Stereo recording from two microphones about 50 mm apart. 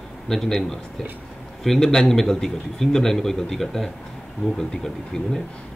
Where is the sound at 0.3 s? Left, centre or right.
Centre.